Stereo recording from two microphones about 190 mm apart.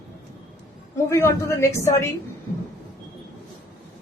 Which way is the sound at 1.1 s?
15° left (ahead or behind).